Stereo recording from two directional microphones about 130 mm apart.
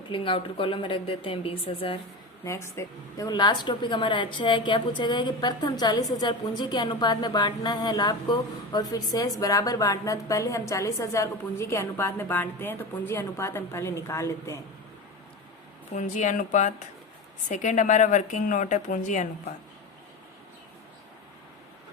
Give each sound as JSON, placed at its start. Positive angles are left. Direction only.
{"t": 0.1, "sound": "a woman's voice", "side_deg": 40}
{"t": 2.4, "sound": "a woman's voice", "side_deg": 20}
{"t": 16.0, "sound": "speech", "side_deg": 70}